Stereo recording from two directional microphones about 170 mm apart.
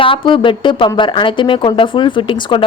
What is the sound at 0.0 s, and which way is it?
A woman's voice, 30° left (ahead or behind).